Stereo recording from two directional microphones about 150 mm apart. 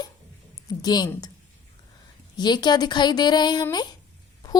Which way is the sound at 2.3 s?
30° left (ahead or behind).